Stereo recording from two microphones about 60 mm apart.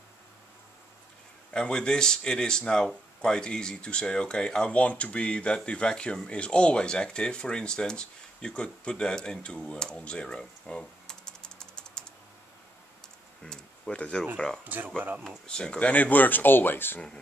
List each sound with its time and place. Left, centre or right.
1.5 s speech: centre
13.4 s a sound: centre
13.9 s speech: left
14.3 s speech: centre
14.6 s speech: right
15.4 s speech: centre; by 17.0 s left